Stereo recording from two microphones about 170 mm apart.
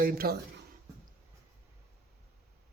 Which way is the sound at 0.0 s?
60° right (ahead or behind).